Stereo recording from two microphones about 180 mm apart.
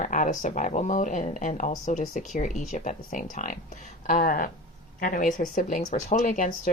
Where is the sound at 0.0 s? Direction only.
45° left (ahead or behind).